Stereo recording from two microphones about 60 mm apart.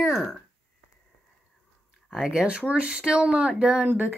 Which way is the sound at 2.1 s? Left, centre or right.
Centre.